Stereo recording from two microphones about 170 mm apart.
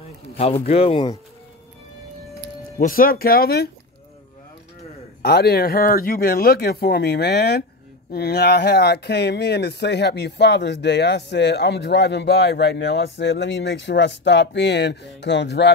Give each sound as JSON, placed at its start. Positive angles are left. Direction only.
{"t": 0.4, "sound": "speech", "side_deg": 35}
{"t": 2.8, "sound": "speech", "side_deg": 60}
{"t": 5.2, "sound": "speech", "side_deg": 70}